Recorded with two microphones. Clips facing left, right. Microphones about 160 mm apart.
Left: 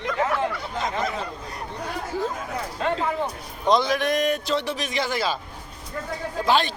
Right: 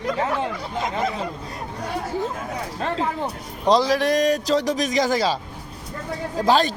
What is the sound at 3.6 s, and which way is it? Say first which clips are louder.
A man's voice: right 3 dB; 35° right (ahead or behind).